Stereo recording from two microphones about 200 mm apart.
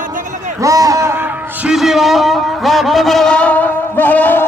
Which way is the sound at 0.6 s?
15° right (ahead or behind).